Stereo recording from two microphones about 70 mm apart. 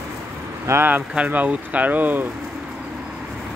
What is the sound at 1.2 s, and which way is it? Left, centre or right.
Speech, right.